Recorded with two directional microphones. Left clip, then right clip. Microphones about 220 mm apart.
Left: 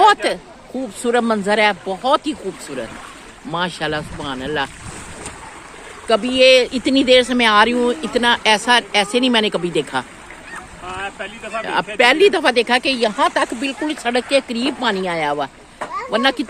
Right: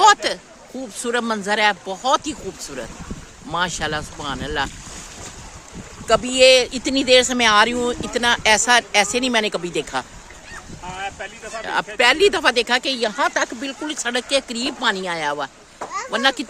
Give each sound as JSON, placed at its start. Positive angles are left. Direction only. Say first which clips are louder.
{"t": 0.0, "sound": "chatter", "louder": "left 1 dB", "side_deg": 10}
{"t": 1.0, "sound": "speech", "louder": "left 5 dB", "side_deg": 10}
{"t": 3.5, "sound": "speech", "louder": "left 1 dB", "side_deg": 0}
{"t": 6.1, "sound": "speech", "louder": "left 1 dB", "side_deg": 0}
{"t": 10.9, "sound": "boat", "louder": "left 2 dB", "side_deg": 45}
{"t": 11.6, "sound": "speech", "louder": "left 2 dB", "side_deg": 5}